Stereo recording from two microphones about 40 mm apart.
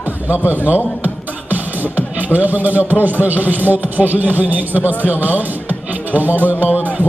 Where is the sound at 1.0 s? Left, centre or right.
Right.